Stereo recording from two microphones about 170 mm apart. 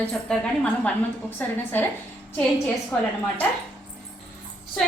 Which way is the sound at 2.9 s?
10° left (ahead or behind).